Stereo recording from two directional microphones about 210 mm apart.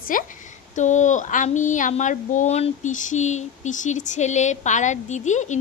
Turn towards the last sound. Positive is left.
turn(degrees=35)  # may be behind; listen again after turning